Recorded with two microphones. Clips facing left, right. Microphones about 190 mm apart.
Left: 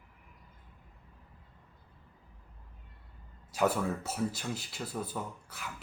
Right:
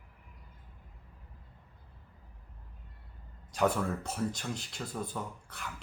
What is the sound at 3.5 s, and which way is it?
Speech, 5° left (ahead or behind).